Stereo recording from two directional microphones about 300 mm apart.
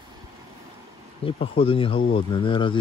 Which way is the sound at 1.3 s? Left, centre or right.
Centre.